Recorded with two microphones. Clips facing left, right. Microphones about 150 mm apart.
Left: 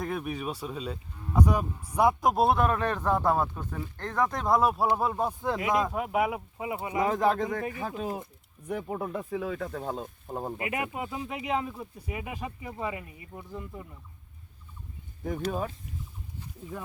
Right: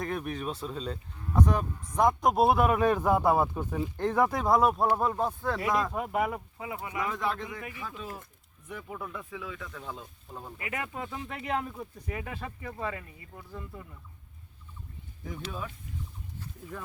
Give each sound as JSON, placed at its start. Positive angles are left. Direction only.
{"t": 0.0, "sound": "speech", "side_deg": 5}
{"t": 6.6, "sound": "speech", "side_deg": 20}
{"t": 7.1, "sound": "speech", "side_deg": 40}
{"t": 10.6, "sound": "speech", "side_deg": 20}
{"t": 15.2, "sound": "speech", "side_deg": 50}